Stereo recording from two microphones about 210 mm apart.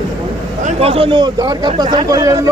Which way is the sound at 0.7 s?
25° right (ahead or behind).